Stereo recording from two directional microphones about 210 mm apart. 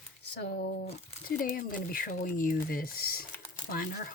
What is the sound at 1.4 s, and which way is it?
Speech, 40° left (ahead or behind).